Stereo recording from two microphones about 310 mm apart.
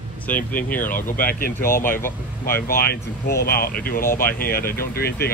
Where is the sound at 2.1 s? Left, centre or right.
Left.